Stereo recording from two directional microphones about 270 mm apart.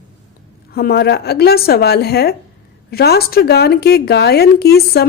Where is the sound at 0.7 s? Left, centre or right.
Left.